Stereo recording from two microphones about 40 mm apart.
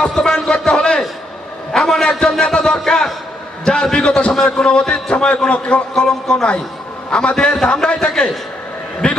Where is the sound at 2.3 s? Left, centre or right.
Centre.